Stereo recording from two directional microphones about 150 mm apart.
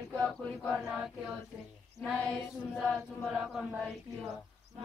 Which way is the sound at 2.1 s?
15° left (ahead or behind).